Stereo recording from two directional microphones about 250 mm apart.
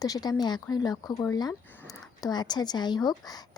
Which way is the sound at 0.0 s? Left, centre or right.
Centre.